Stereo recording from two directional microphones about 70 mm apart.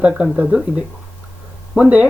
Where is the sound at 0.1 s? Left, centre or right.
Centre.